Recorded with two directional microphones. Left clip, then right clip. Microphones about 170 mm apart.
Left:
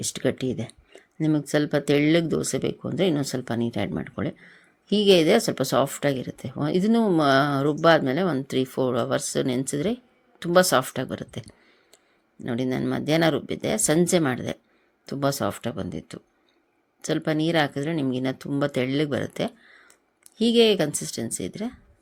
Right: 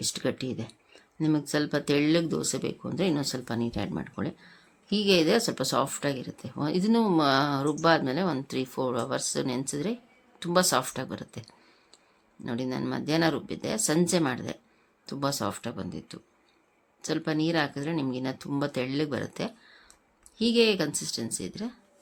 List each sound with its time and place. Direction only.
0.0 s speech: 25° left (ahead or behind)
12.5 s speech: 25° left (ahead or behind)